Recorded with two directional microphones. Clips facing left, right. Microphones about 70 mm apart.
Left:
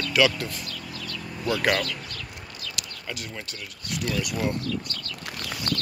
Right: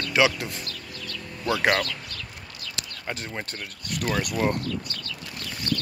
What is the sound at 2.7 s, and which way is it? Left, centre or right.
Speech, right.